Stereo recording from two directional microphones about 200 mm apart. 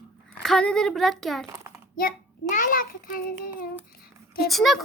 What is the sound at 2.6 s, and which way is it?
A child's voice, 45° left (ahead or behind).